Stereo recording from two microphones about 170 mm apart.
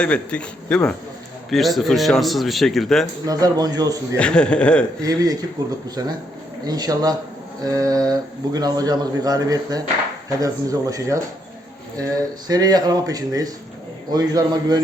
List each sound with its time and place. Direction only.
0.0 s a man's voice: 5° left (ahead or behind)
3.2 s speech: 20° right (ahead or behind)
4.2 s a man's voice: 5° left (ahead or behind)
5.0 s speech: 20° right (ahead or behind)
12.5 s speech: 25° right (ahead or behind)